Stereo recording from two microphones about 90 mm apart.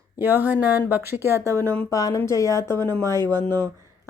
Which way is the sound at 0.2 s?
20° right (ahead or behind).